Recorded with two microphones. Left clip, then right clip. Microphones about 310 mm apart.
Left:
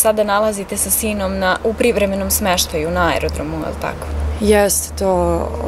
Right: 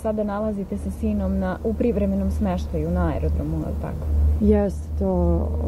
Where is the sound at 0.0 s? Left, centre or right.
Centre.